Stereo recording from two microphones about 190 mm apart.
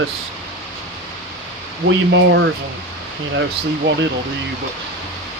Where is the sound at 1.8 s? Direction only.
75° right (ahead or behind).